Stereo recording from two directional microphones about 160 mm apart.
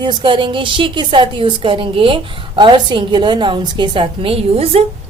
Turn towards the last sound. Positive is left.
turn(degrees=-40)  # may be behind; listen again after turning